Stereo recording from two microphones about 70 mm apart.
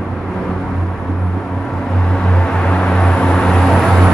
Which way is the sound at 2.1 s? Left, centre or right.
Centre.